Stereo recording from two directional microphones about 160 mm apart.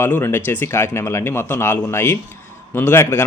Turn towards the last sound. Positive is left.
turn(degrees=15)  # may be behind; listen again after turning